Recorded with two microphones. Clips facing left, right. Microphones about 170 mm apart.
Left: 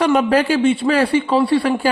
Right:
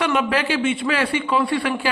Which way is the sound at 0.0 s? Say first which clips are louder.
Left 6 dB; 40° left (ahead or behind).